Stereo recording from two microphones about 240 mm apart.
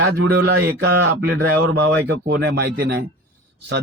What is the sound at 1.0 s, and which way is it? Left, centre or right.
A man's voice, right.